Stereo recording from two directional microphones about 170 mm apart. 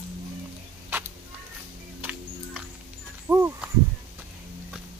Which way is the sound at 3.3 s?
15° right (ahead or behind).